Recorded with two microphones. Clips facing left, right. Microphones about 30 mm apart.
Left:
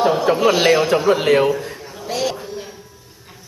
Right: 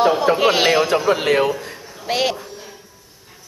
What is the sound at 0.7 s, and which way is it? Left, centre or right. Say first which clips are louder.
A man's voice: left 2 dB; centre.